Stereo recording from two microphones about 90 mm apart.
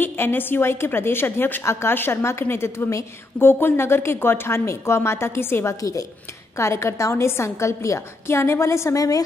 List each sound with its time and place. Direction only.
0.0 s a woman's voice: 20° left (ahead or behind)
5.8 s a woman's voice: 40° left (ahead or behind)